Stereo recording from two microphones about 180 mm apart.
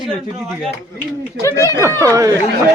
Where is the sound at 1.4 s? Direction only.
15° left (ahead or behind).